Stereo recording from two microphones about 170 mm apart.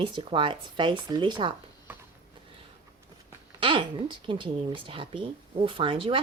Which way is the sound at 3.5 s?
30° right (ahead or behind).